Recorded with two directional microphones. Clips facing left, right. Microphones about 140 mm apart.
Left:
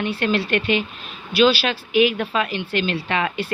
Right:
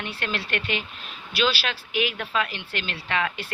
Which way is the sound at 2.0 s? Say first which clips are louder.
Left 8 dB; 5° left (ahead or behind).